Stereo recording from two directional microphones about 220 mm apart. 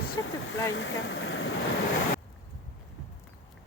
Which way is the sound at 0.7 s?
60° left (ahead or behind).